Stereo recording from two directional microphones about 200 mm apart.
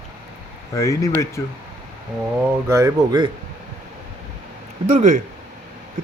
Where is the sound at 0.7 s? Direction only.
15° left (ahead or behind).